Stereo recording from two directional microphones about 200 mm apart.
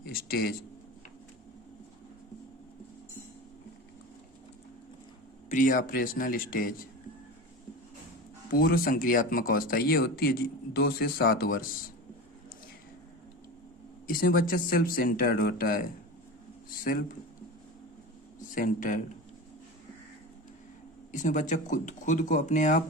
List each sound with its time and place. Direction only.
0.0 s a sound: 50° left (ahead or behind)
5.5 s speech: 40° left (ahead or behind)
8.5 s speech: 50° left (ahead or behind)
14.1 s speech: 45° left (ahead or behind)
18.5 s speech: 40° left (ahead or behind)
21.1 s speech: 40° left (ahead or behind)